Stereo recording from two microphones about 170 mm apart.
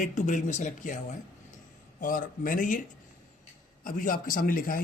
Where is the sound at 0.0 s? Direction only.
45° left (ahead or behind).